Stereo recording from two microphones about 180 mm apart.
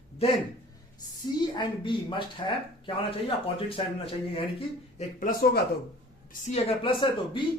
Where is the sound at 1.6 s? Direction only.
25° left (ahead or behind).